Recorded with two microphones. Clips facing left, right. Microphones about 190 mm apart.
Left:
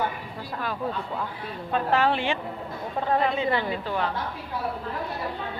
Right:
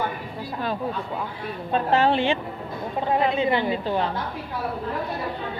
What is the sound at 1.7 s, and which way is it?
A woman's voice, 25° right (ahead or behind).